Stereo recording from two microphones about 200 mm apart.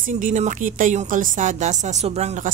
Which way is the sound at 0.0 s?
40° right (ahead or behind).